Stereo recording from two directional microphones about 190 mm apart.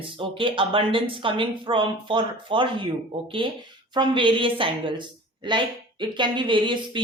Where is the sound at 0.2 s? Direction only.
25° right (ahead or behind).